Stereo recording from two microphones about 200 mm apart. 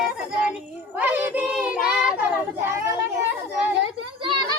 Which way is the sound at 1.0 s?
10° right (ahead or behind).